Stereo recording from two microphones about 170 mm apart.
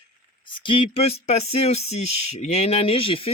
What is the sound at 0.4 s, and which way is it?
Speech, 30° left (ahead or behind).